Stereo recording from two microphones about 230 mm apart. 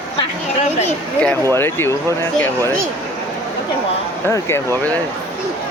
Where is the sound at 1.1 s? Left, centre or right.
Centre.